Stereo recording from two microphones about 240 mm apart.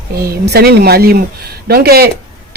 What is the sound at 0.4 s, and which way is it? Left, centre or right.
Speech, right.